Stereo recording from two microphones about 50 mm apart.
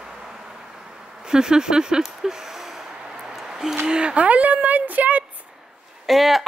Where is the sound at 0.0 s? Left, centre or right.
Centre.